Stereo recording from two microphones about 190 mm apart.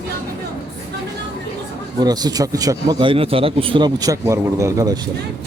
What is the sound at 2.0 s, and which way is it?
A man's voice, 20° right (ahead or behind).